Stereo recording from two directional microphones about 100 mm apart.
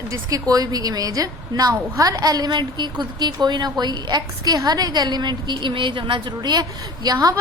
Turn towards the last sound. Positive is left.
turn(degrees=-40)  # may be behind; listen again after turning